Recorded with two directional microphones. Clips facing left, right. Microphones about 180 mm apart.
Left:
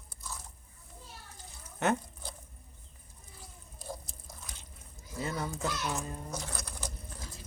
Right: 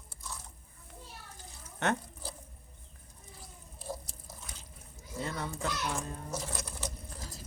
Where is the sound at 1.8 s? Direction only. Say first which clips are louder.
Left 2 dB; 5° left (ahead or behind).